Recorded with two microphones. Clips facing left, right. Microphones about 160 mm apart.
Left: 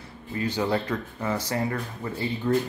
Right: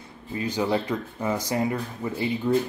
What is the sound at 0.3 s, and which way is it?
Speech, 15° right (ahead or behind).